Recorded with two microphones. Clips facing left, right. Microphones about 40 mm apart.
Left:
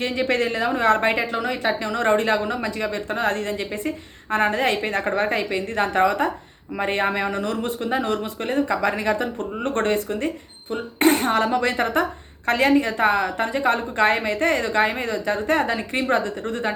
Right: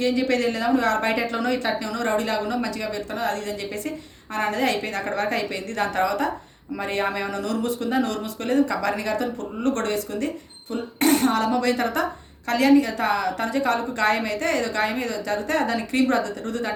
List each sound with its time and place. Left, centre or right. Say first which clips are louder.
0.0 s speech: right 1 dB; left
1.3 s speech: left 1 dB; centre
1.8 s a woman's voice: left 4 dB; left